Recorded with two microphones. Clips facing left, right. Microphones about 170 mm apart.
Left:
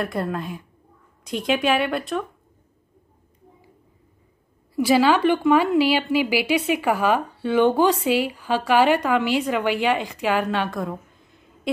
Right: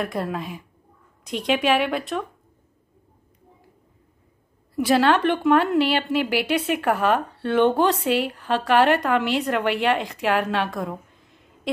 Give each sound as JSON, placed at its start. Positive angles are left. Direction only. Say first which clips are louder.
{"t": 0.0, "sound": "a woman's voice", "louder": "left 1 dB", "side_deg": 0}
{"t": 4.7, "sound": "a woman's voice", "louder": "left 1 dB", "side_deg": 0}